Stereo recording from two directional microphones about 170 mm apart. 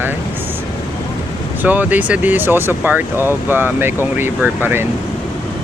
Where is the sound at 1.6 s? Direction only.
10° right (ahead or behind).